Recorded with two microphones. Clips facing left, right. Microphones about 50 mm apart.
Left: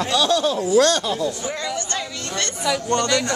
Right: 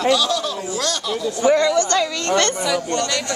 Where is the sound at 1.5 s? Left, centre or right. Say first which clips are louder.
Right 11 dB; right.